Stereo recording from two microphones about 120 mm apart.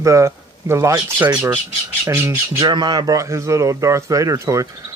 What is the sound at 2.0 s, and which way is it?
Speech, 20° right (ahead or behind).